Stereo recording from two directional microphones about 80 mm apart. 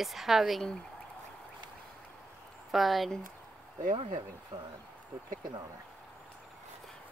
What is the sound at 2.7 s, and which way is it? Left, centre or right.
Speech, centre.